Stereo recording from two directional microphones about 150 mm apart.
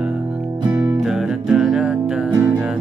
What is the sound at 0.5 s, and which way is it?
Music, 30° right (ahead or behind).